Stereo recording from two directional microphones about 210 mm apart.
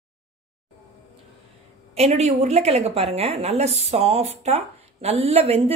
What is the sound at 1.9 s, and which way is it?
A woman's voice, 30° right (ahead or behind).